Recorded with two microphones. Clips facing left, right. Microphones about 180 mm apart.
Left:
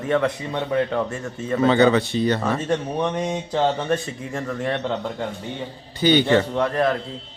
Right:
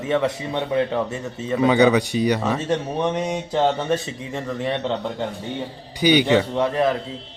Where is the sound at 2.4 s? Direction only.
5° right (ahead or behind).